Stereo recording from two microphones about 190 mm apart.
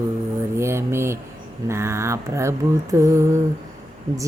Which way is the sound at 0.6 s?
15° right (ahead or behind).